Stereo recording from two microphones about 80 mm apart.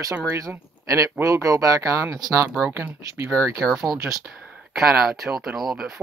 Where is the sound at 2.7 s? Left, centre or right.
Right.